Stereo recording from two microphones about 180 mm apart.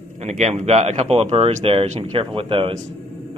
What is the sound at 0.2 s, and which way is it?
Speech, 40° right (ahead or behind).